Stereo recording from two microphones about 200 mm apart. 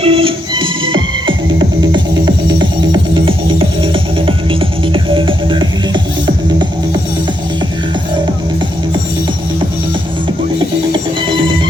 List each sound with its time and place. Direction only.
0.0 s music: 30° right (ahead or behind)